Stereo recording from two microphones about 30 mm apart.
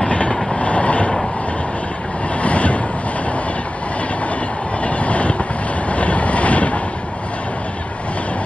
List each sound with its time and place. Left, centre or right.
0.0 s train: left
2.4 s vehicle: left
4.8 s train: left
5.9 s vehicle: left